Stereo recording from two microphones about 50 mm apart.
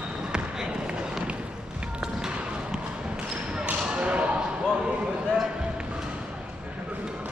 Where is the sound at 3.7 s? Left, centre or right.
Right.